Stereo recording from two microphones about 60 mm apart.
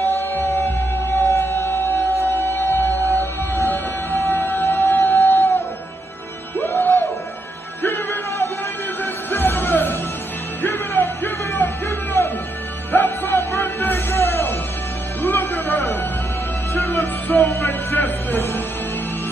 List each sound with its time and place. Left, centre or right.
0.0 s music: left
2.2 s music: left
6.6 s music: left
17.5 s music: left
17.9 s music: left